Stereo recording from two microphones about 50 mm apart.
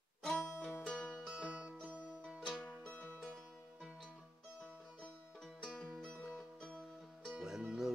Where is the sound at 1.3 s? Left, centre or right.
Right.